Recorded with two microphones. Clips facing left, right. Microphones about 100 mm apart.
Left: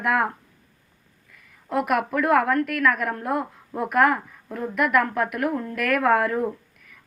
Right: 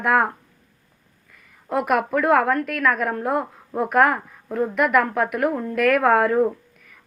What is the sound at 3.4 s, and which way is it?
Speech, 30° right (ahead or behind).